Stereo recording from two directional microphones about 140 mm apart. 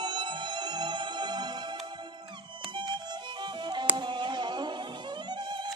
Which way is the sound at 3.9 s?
35° right (ahead or behind).